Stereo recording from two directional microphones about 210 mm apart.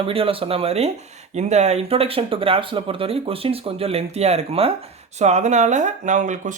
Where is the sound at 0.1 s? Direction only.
25° right (ahead or behind).